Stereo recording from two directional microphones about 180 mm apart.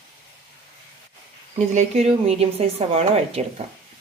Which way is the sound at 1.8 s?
35° right (ahead or behind).